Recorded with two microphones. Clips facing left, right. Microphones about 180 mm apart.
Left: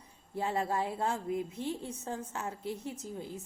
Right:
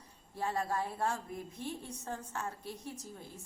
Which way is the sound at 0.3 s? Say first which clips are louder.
Left 3 dB; 20° left (ahead or behind).